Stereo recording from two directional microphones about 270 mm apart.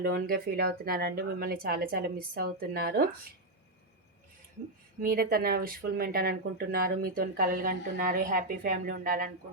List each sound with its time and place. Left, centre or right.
0.0 s speech: right
4.9 s speech: right